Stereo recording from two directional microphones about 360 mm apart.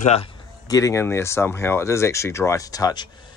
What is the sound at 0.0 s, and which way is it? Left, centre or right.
Speech, centre.